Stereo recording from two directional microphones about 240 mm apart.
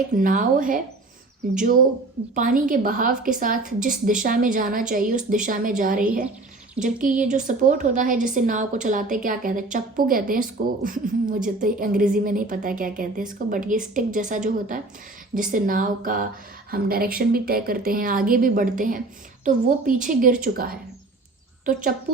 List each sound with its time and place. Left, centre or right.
0.1 s a woman's voice: right
2.3 s a woman's voice: right